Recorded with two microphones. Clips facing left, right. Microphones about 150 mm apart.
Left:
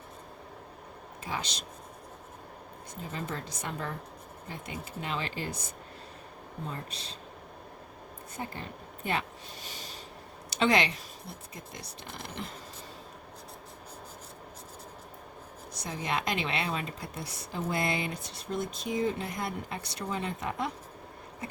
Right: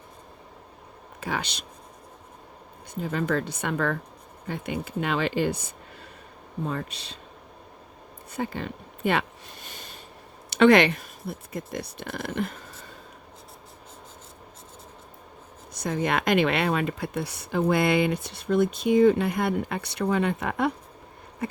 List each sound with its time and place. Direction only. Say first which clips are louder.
1.2 s speech: right 6 dB; 65° right (ahead or behind)
2.9 s speech: right 11 dB; 70° right (ahead or behind)
6.7 s speech: right 8 dB; 70° right (ahead or behind)
8.4 s a sound: right 9 dB; 75° right (ahead or behind); by 10.0 s 55° right (ahead or behind)
10.5 s speech: right 9 dB; 60° right (ahead or behind)
15.7 s speech: right 7 dB; 55° right (ahead or behind)